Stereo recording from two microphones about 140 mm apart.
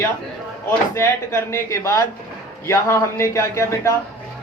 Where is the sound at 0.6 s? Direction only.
20° left (ahead or behind).